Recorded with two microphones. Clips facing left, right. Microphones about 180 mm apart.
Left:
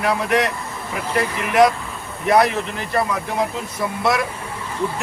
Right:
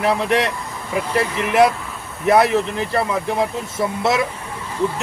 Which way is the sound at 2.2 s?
25° right (ahead or behind).